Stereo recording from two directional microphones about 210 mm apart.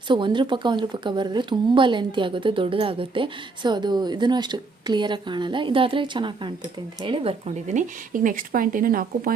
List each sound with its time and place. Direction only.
0.1 s speech: 20° right (ahead or behind); by 9.3 s 45° right (ahead or behind)